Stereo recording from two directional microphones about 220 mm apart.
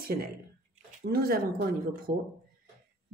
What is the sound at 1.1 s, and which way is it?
A woman's voice, 45° right (ahead or behind).